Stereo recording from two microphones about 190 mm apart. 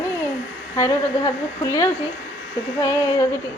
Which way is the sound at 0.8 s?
15° left (ahead or behind).